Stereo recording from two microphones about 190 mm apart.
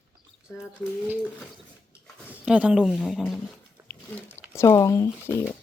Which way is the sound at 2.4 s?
5° right (ahead or behind).